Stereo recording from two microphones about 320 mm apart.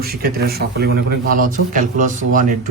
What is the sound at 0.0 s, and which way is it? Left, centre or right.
Speech, right.